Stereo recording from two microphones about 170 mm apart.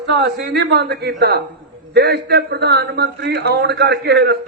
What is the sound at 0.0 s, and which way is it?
A woman's voice, 75° right (ahead or behind).